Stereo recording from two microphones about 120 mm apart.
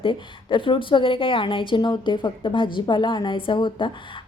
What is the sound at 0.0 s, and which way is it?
A woman's voice, 45° left (ahead or behind).